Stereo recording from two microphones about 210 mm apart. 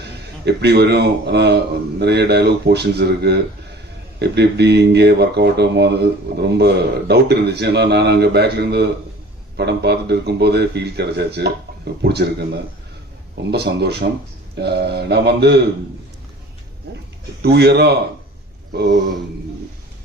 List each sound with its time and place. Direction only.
0.0 s speech: 50° right (ahead or behind)
17.4 s speech: 50° right (ahead or behind)